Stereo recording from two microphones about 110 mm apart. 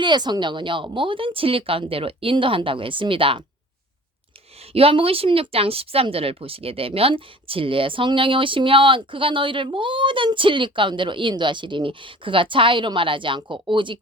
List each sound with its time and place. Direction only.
0.0 s speech: 40° right (ahead or behind)
4.6 s speech: 60° right (ahead or behind)